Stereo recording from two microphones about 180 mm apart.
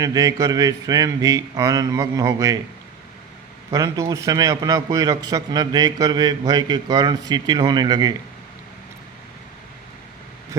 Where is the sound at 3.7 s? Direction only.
20° right (ahead or behind).